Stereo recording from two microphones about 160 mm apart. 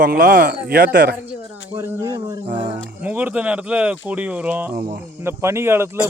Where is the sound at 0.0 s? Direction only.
60° right (ahead or behind).